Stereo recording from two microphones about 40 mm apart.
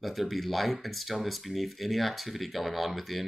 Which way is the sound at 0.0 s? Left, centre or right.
Centre.